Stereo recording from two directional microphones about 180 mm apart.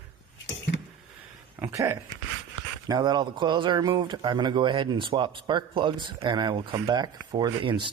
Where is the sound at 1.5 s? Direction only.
15° right (ahead or behind).